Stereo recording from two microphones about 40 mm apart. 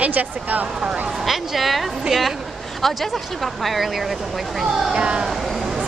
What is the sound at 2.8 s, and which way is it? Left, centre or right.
Speech, centre.